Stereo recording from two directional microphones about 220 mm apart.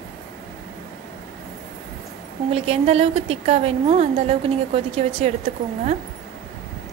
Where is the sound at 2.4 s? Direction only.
25° right (ahead or behind).